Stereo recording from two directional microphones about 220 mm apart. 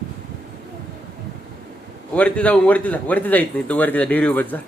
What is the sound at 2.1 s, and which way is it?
Speech, 5° left (ahead or behind).